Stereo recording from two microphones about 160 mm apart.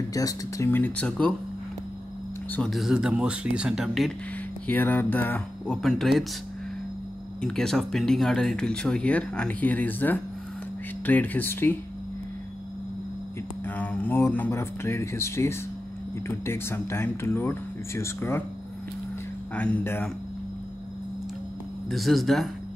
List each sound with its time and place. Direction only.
0.1 s speech: 20° left (ahead or behind)
2.5 s speech: centre (ahead or behind)
4.6 s speech: 10° left (ahead or behind)
7.4 s speech: 5° left (ahead or behind)
13.7 s speech: 10° left (ahead or behind)
19.5 s speech: 10° left (ahead or behind)
21.8 s speech: centre (ahead or behind)